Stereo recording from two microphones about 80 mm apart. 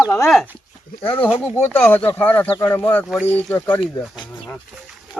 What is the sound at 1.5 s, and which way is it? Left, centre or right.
Speech, left.